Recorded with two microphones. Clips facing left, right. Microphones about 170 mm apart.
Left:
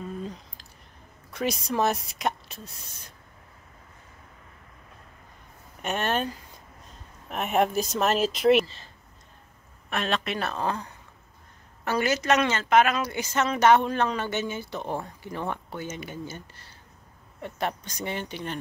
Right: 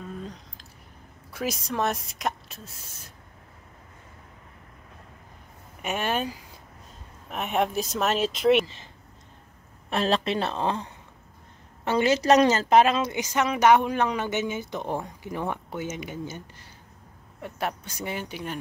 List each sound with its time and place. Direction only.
0.2 s a sound: centre (ahead or behind)
1.3 s speech: centre (ahead or behind)
5.8 s a woman's voice: 10° right (ahead or behind)
9.8 s a woman's voice: 30° right (ahead or behind); by 18.6 s 5° right (ahead or behind)